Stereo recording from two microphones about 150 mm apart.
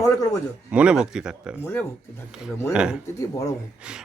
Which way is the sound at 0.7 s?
5° right (ahead or behind).